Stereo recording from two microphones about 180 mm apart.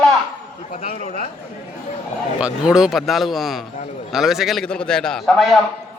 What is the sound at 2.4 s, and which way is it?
A man's voice, 5° right (ahead or behind).